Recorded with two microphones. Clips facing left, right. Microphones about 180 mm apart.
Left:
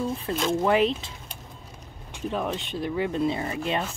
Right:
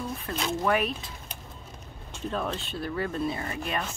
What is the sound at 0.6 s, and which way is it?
Speech, 25° left (ahead or behind).